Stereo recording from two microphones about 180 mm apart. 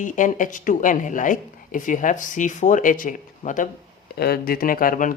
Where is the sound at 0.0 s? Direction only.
45° left (ahead or behind).